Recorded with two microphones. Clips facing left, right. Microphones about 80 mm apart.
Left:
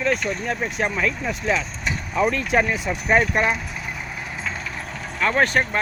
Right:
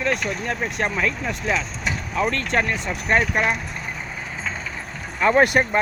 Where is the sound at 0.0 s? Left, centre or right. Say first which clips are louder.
Left 1 dB; centre.